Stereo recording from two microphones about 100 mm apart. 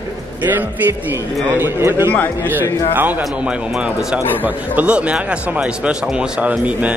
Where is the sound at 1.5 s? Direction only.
25° right (ahead or behind).